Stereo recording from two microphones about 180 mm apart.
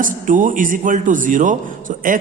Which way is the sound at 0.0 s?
45° right (ahead or behind).